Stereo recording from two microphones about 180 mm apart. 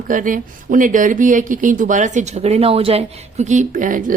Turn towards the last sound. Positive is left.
turn(degrees=-45)  # may be behind; listen again after turning